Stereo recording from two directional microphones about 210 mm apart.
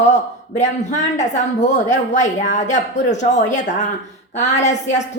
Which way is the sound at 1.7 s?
35° left (ahead or behind).